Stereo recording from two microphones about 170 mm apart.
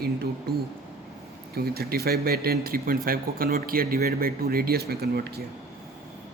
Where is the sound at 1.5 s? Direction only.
65° right (ahead or behind).